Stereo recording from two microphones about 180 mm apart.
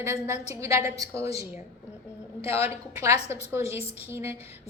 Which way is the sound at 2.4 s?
35° left (ahead or behind).